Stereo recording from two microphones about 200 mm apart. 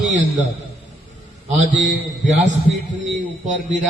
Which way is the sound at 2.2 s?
35° right (ahead or behind).